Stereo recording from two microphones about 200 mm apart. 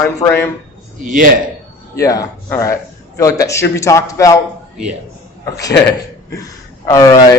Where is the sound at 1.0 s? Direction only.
40° right (ahead or behind).